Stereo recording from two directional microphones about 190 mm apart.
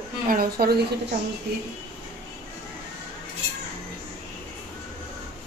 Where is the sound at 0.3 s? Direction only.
50° right (ahead or behind).